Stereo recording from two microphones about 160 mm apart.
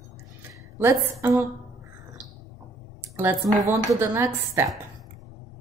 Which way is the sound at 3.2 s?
15° right (ahead or behind).